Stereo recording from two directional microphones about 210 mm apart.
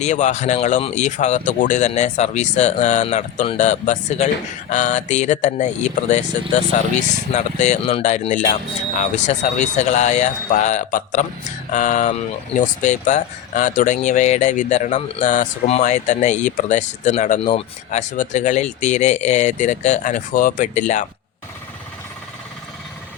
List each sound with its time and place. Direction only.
0.0 s speech: 35° left (ahead or behind)
7.3 s speech: 35° left (ahead or behind)